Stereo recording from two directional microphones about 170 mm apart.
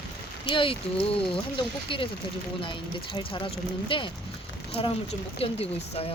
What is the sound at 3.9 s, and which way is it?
Speech, 30° left (ahead or behind).